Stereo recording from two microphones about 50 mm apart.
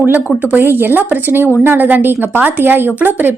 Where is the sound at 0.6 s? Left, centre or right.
Right.